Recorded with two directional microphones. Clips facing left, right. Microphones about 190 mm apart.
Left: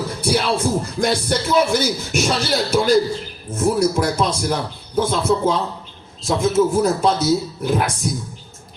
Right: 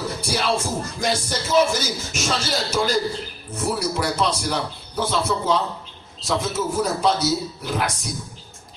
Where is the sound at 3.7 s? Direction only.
45° left (ahead or behind).